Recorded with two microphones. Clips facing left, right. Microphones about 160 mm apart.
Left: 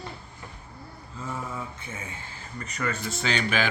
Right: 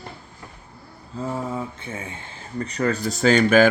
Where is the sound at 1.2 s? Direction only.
30° right (ahead or behind).